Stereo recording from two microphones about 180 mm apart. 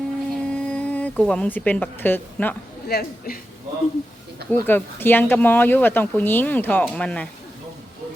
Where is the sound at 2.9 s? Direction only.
55° left (ahead or behind).